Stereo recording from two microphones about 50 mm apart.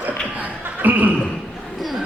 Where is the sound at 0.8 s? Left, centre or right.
Right.